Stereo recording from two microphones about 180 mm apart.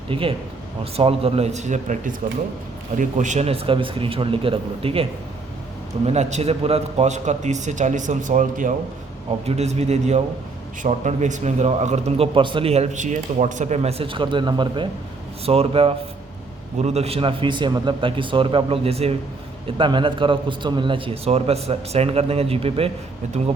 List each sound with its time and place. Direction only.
0.1 s a man's voice: 30° right (ahead or behind)
6.1 s a man's voice: 35° right (ahead or behind)